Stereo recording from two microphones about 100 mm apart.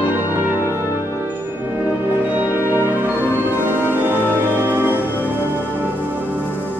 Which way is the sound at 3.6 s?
20° right (ahead or behind).